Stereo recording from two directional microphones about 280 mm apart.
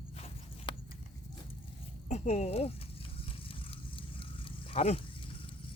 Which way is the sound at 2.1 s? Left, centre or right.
Left.